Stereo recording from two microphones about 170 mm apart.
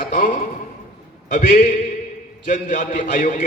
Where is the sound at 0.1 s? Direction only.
45° left (ahead or behind).